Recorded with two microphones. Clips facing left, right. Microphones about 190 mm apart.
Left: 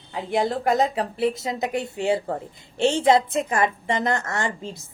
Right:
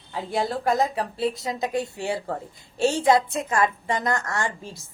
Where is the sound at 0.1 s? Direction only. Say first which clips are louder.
Left 3 dB; 20° left (ahead or behind).